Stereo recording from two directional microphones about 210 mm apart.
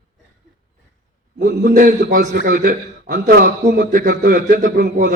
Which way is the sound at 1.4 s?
40° right (ahead or behind).